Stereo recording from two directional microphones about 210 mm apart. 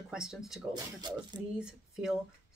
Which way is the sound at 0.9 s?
20° right (ahead or behind).